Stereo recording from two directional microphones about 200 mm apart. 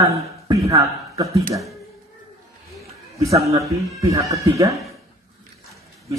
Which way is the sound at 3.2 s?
15° right (ahead or behind).